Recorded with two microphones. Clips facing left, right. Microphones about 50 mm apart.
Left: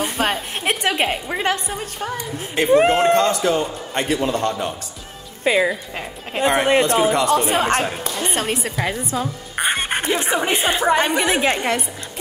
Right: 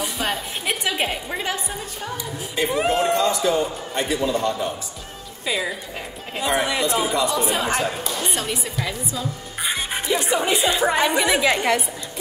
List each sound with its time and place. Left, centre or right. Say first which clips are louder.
0.0 s a woman's voice: left 4 dB; left
5.5 s a woman's voice: left 7 dB; left
5.9 s a woman's voice: left 5 dB; left
8.7 s music: left 5 dB; left
10.1 s a woman's voice: right 2 dB; left